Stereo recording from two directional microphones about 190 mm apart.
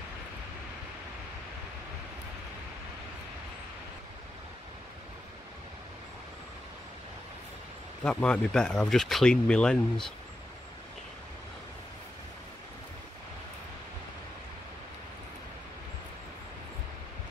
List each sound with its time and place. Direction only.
8.0 s speech: 5° left (ahead or behind)